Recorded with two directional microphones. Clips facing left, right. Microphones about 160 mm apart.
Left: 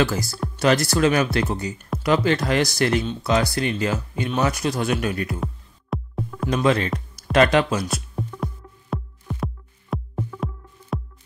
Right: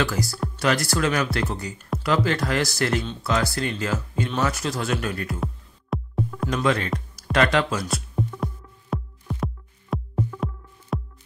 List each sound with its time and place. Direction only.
0.0 s speech: 25° left (ahead or behind)
5.4 s music: centre (ahead or behind)
6.5 s speech: 20° left (ahead or behind)
8.2 s music: centre (ahead or behind)